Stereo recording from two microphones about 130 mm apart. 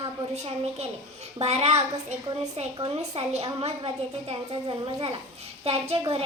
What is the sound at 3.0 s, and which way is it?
A woman's voice, 55° right (ahead or behind).